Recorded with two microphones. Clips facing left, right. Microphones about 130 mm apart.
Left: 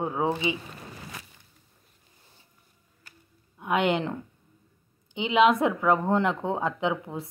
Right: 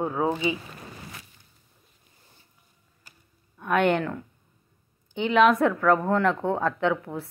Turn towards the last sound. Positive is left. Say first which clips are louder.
# right 3 dB
turn(degrees=15)  # may be behind; listen again after turning